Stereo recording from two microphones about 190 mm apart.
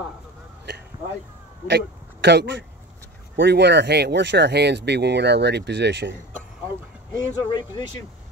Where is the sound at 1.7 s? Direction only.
65° right (ahead or behind).